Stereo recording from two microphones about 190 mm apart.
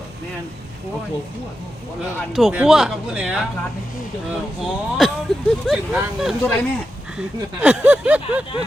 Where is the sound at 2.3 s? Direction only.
5° right (ahead or behind).